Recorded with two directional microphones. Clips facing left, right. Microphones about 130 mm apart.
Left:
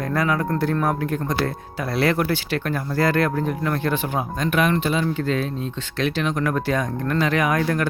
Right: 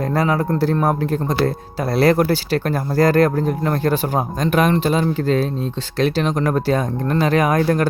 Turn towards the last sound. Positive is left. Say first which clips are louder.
# right 4 dB
turn(degrees=-35)  # may be behind; listen again after turning